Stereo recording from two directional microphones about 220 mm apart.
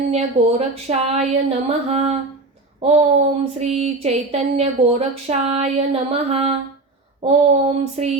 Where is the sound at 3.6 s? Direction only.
30° right (ahead or behind).